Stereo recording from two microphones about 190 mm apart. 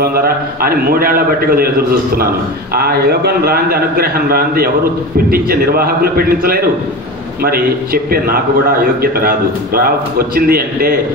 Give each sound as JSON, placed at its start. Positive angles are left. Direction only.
{"t": 0.0, "sound": "a man's voice", "side_deg": -50}
{"t": 2.7, "sound": "a man's voice", "side_deg": -55}